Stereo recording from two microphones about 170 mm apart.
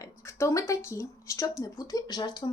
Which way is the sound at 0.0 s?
15° left (ahead or behind).